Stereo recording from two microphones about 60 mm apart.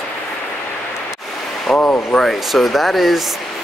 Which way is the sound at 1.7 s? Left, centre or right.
Left.